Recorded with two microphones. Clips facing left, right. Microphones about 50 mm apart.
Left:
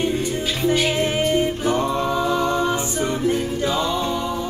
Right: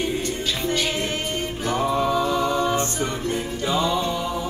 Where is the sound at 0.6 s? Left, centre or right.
Centre.